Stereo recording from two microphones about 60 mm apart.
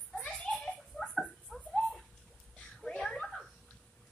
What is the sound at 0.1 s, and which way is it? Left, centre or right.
Children playing, centre.